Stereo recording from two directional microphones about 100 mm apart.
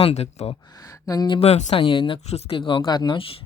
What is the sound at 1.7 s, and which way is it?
Speech, 60° left (ahead or behind).